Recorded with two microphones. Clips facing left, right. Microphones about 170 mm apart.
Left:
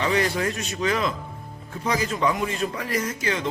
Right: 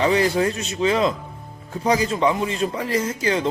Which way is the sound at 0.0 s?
30° right (ahead or behind).